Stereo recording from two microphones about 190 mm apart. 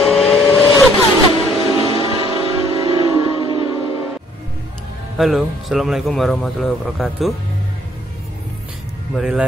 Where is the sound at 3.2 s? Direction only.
25° right (ahead or behind).